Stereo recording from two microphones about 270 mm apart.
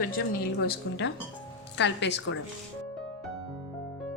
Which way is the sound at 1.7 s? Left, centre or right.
Left.